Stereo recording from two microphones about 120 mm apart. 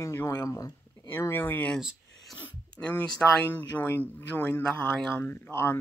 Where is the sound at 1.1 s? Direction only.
20° left (ahead or behind).